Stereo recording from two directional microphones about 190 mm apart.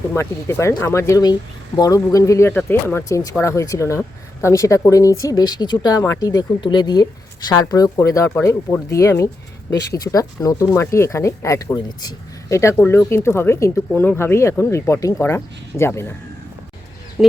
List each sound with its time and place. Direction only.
0.1 s speech: 15° left (ahead or behind)
17.2 s speech: 5° right (ahead or behind)